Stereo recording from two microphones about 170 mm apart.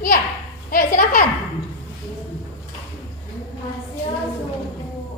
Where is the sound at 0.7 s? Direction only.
55° left (ahead or behind).